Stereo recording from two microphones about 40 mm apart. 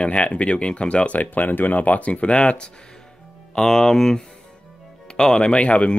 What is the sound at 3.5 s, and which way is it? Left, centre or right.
Speech, centre.